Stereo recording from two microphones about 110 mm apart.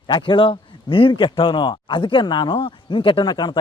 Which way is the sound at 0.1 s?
50° left (ahead or behind).